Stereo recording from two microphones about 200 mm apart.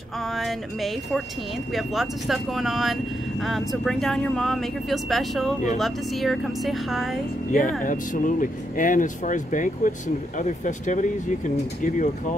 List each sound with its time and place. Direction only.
0.4 s speech: centre (ahead or behind)
7.8 s speech: 40° left (ahead or behind)